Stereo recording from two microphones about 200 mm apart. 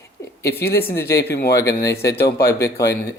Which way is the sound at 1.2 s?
55° left (ahead or behind).